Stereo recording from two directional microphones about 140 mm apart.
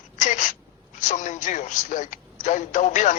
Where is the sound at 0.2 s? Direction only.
65° left (ahead or behind).